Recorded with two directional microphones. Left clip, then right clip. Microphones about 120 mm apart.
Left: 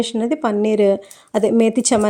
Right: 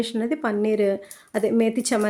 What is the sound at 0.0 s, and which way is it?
Speech, 40° left (ahead or behind).